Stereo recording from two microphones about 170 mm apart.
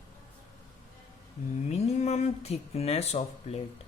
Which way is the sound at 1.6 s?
40° left (ahead or behind).